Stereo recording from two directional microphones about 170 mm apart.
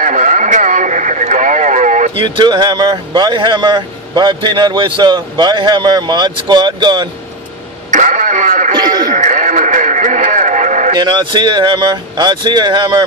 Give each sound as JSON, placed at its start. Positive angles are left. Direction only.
{"t": 0.0, "sound": "radio", "side_deg": -45}
{"t": 2.2, "sound": "a man's voice", "side_deg": -25}
{"t": 7.9, "sound": "radio", "side_deg": -50}
{"t": 8.7, "sound": "a sound", "side_deg": -25}
{"t": 9.1, "sound": "radio", "side_deg": -45}
{"t": 11.0, "sound": "a man's voice", "side_deg": -25}